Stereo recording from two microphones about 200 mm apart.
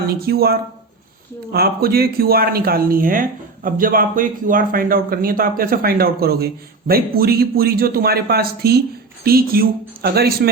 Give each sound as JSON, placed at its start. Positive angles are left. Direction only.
{"t": 0.1, "sound": "speech", "side_deg": -50}